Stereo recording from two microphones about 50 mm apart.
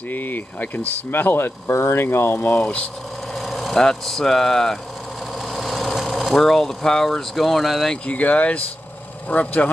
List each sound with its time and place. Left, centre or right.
0.1 s speech: left
2.6 s speech: left
3.3 s speech: centre
5.5 s speech: centre
8.1 s speech: left